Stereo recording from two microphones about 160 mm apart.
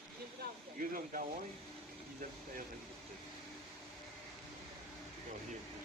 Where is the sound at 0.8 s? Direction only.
60° right (ahead or behind).